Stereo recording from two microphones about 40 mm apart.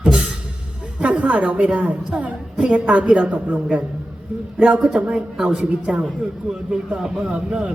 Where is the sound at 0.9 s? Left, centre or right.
Right.